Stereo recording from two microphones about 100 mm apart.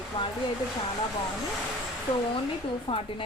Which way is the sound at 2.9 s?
55° left (ahead or behind).